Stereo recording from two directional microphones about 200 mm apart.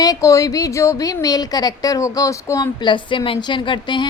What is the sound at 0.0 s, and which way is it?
A woman's voice, 15° left (ahead or behind).